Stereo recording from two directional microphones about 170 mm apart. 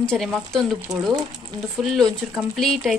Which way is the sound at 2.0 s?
Centre (ahead or behind).